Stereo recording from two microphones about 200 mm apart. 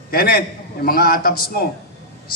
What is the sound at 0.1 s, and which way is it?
A man's voice, 45° left (ahead or behind).